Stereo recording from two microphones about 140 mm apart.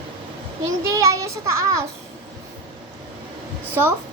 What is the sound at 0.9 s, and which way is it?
Speech, 25° right (ahead or behind).